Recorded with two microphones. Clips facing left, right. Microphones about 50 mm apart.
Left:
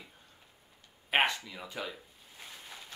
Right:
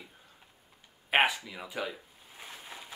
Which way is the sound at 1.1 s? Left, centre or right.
Centre.